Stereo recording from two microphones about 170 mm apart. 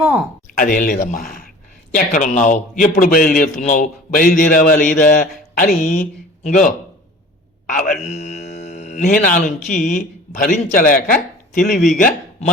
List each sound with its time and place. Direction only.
0.0 s speech: 10° right (ahead or behind)
0.5 s a man's voice: 50° left (ahead or behind)